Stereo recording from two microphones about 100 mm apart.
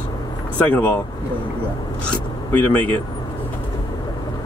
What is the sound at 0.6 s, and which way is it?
Speech, 20° left (ahead or behind).